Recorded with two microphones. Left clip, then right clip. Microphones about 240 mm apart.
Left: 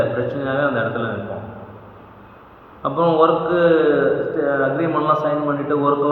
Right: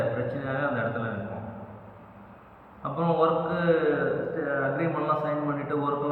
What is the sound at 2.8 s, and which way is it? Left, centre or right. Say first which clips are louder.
A man's voice: left 9 dB; right.